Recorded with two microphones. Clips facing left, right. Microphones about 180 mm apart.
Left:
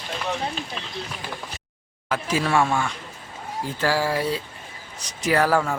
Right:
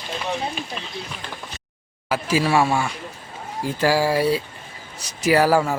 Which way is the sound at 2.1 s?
5° right (ahead or behind).